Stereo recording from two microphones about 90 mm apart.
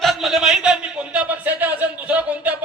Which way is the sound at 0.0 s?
Centre (ahead or behind).